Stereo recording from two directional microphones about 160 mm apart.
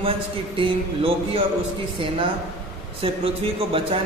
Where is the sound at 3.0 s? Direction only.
35° right (ahead or behind).